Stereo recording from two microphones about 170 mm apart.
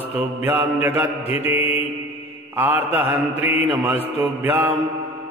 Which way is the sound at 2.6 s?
10° right (ahead or behind).